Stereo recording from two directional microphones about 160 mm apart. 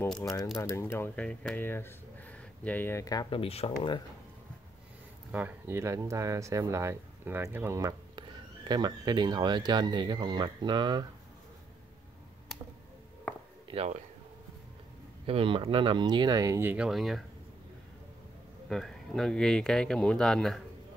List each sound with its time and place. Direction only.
0.6 s speech: 20° left (ahead or behind)
3.3 s speech: 35° left (ahead or behind)
5.3 s speech: 15° right (ahead or behind)
13.7 s speech: 35° right (ahead or behind)
15.2 s speech: 35° right (ahead or behind); by 17.2 s centre (ahead or behind)
18.7 s speech: 5° left (ahead or behind)